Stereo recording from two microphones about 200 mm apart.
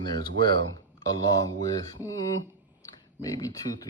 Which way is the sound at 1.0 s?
20° left (ahead or behind).